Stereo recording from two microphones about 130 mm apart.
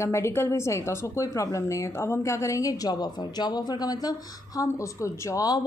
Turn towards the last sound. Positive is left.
turn(degrees=25)  # may be behind; listen again after turning